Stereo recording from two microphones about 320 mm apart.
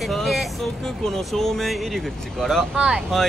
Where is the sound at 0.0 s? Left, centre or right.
Centre.